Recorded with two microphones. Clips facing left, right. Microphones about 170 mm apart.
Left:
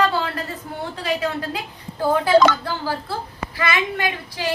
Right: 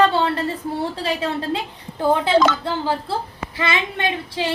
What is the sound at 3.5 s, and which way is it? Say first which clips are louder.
Speech: even; 25° right (ahead or behind).